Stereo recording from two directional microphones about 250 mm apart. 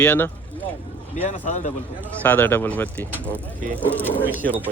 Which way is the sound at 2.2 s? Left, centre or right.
Centre.